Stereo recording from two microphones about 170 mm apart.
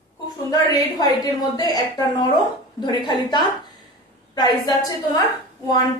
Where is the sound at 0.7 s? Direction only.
20° left (ahead or behind).